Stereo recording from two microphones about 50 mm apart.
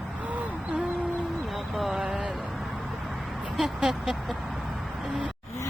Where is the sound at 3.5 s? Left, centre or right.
Centre.